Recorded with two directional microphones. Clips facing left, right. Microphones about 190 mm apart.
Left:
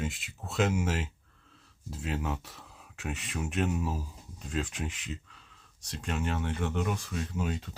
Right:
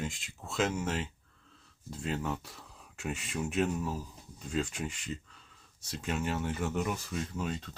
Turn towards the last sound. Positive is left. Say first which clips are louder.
# left 2 dB
turn(degrees=5)  # may be behind; listen again after turning